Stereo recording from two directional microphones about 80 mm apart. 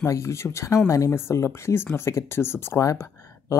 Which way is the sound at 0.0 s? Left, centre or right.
Left.